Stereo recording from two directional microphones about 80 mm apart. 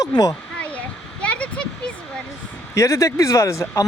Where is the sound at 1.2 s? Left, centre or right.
Centre.